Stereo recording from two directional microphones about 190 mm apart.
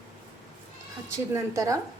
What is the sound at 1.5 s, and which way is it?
Speech, 15° right (ahead or behind).